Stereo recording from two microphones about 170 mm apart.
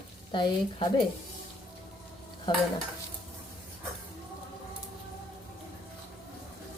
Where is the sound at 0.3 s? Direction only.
25° left (ahead or behind).